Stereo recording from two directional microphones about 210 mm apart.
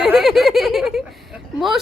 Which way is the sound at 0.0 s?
Centre (ahead or behind).